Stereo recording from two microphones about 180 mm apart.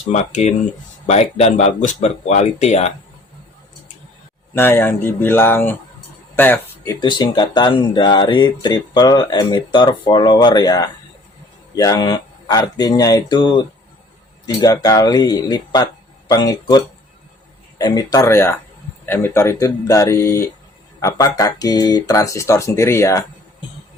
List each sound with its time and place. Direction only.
0.1 s speech: 40° left (ahead or behind)
4.5 s speech: 15° left (ahead or behind)
7.0 s speech: 25° left (ahead or behind)